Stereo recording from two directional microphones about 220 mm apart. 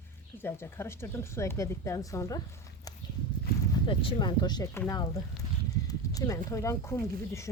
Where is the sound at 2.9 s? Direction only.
15° left (ahead or behind).